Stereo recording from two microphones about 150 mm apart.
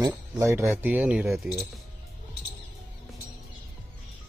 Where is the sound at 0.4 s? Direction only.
20° right (ahead or behind); by 1.5 s centre (ahead or behind).